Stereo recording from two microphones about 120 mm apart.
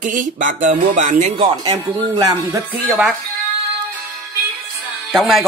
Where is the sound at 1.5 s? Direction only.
40° right (ahead or behind).